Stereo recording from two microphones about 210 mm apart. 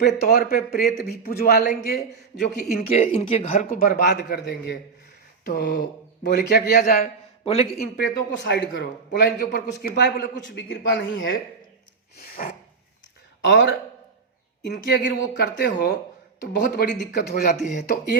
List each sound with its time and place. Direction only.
0.3 s speech: 45° left (ahead or behind)
2.6 s speech: 35° left (ahead or behind)
7.4 s a man's voice: 25° left (ahead or behind)
7.8 s a man's voice: 50° left (ahead or behind)
12.1 s a sound: 45° left (ahead or behind)
13.4 s a man's voice: 60° left (ahead or behind)